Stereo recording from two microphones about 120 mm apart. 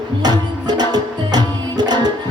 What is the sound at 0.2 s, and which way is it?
Music, 35° right (ahead or behind).